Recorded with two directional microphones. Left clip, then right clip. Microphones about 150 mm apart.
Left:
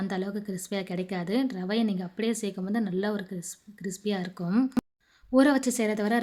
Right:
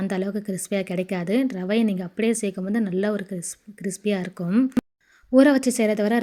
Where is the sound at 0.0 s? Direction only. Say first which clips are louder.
Right 5 dB; 25° right (ahead or behind).